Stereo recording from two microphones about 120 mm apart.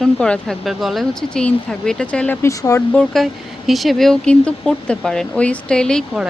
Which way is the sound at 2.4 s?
25° left (ahead or behind).